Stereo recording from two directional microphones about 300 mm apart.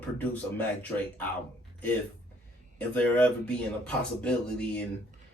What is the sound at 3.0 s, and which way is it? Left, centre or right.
Speech, centre.